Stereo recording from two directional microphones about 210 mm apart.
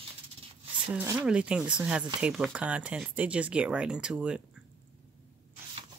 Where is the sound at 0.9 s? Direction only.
10° right (ahead or behind).